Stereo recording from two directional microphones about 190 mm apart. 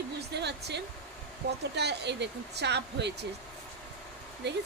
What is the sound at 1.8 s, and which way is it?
Speech, 65° right (ahead or behind).